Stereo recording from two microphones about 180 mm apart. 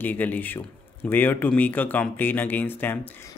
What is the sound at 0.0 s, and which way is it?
Speech, 10° left (ahead or behind).